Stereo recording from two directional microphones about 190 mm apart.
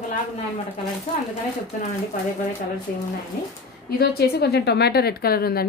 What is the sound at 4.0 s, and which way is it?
A woman's voice, 60° left (ahead or behind).